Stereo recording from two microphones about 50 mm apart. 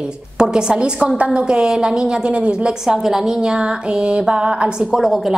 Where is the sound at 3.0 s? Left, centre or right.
Centre.